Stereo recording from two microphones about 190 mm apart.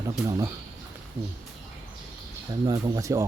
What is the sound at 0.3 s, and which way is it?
Speech, 20° right (ahead or behind).